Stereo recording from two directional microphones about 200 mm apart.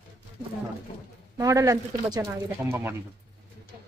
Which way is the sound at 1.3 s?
15° right (ahead or behind).